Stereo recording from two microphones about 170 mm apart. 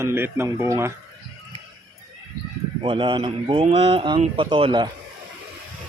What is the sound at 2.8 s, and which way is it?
Speech, 30° right (ahead or behind).